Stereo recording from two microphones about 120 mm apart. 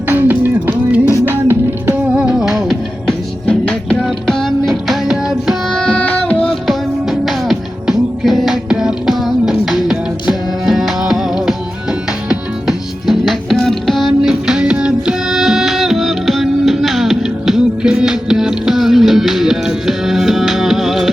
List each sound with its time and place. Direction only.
0.1 s music: 15° right (ahead or behind)
2.1 s music: 5° right (ahead or behind)